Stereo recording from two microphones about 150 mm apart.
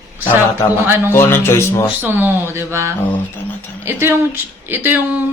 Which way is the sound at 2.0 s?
15° right (ahead or behind).